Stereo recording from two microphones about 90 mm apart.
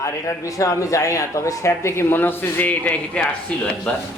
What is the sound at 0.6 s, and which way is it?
Speech, 40° left (ahead or behind).